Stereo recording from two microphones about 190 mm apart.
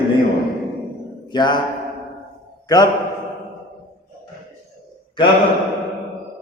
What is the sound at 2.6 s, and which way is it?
Speech, 20° left (ahead or behind).